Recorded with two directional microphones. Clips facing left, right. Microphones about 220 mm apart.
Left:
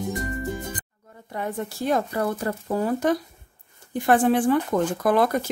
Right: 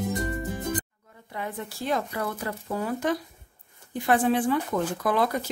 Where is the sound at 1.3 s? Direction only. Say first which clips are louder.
Left 5 dB; 45° left (ahead or behind).